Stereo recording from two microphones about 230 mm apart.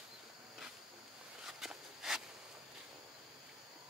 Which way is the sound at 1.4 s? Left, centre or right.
Centre.